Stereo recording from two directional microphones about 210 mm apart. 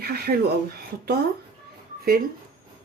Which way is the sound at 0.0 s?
45° right (ahead or behind).